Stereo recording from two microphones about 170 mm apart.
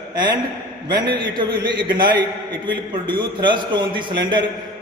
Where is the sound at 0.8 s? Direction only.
25° right (ahead or behind).